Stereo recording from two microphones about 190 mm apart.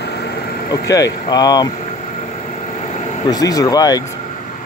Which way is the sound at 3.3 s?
20° left (ahead or behind).